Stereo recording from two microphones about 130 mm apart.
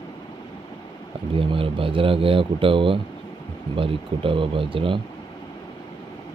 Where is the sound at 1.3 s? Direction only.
45° right (ahead or behind).